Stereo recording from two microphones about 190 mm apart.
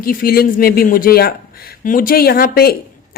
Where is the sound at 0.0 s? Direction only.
50° left (ahead or behind).